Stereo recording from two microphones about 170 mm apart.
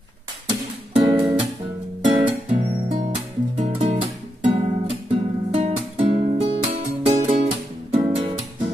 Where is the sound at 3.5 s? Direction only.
35° right (ahead or behind).